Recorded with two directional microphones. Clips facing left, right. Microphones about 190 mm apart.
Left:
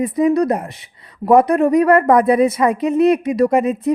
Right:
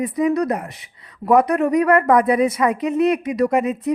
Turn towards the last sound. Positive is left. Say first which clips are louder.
# left 3 dB
turn(degrees=35)  # may be behind; listen again after turning